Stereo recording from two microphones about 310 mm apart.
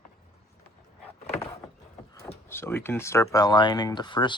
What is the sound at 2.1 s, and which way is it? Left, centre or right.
Speech, centre.